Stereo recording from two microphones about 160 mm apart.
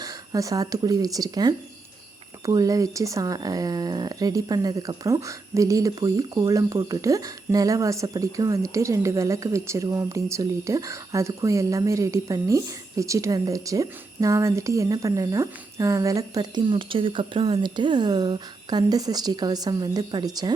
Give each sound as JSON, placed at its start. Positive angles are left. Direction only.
{"t": 0.0, "sound": "speech", "side_deg": -20}